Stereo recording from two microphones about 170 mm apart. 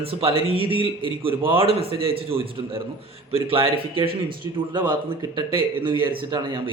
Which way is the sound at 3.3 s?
35° right (ahead or behind).